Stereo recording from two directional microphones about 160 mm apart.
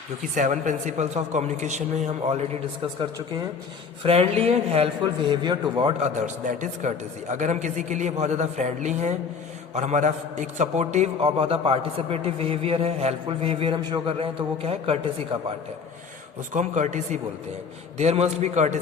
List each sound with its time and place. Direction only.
0.3 s a woman's voice: 50° right (ahead or behind)
4.0 s a man's voice: 40° right (ahead or behind)
5.3 s a man's voice: 25° right (ahead or behind)
6.0 s a woman's voice: 45° right (ahead or behind)
16.6 s a woman's voice: 50° right (ahead or behind)